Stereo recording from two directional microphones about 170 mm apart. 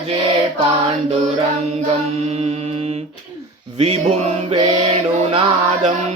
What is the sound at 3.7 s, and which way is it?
Music, 35° right (ahead or behind).